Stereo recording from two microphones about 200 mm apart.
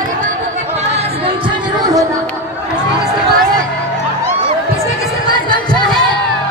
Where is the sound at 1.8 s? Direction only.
20° right (ahead or behind).